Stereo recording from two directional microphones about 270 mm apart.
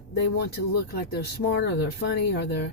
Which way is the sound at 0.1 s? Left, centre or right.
Left.